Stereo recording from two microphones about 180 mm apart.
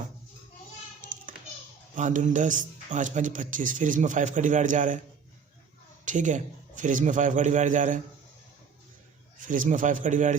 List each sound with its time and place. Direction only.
2.0 s a man's voice: 45° right (ahead or behind)
6.1 s a man's voice: 45° right (ahead or behind)
9.5 s a man's voice: 45° right (ahead or behind)